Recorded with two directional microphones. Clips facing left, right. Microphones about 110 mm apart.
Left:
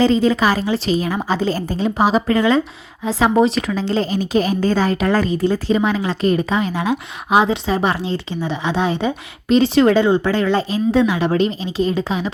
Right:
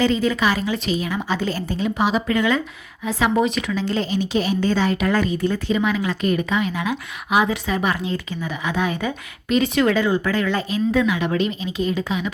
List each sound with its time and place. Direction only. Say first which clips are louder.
0.0 s a woman's voice: left 4 dB; 30° left (ahead or behind)